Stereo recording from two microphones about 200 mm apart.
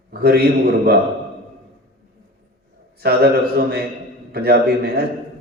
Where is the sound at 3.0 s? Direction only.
50° right (ahead or behind).